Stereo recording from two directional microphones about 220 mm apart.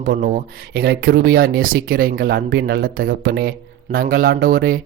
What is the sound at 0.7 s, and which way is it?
Speech, 50° right (ahead or behind).